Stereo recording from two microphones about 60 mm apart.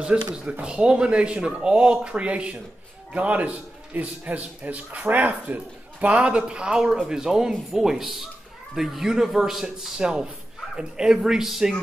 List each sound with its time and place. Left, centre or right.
0.3 s a man's voice: centre